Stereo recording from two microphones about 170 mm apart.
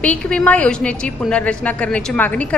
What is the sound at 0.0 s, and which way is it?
A woman's voice, 5° left (ahead or behind).